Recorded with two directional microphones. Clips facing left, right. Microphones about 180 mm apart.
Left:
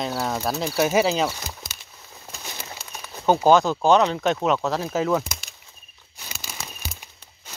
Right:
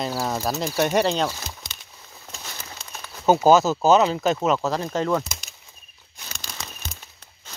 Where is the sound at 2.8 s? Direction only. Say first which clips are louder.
Even; 5° left (ahead or behind).